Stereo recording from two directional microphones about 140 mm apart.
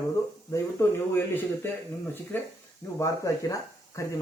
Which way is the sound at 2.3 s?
15° left (ahead or behind).